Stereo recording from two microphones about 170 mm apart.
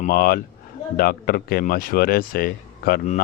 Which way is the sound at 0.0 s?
60° left (ahead or behind).